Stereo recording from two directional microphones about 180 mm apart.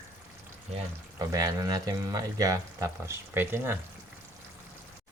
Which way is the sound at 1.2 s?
20° right (ahead or behind).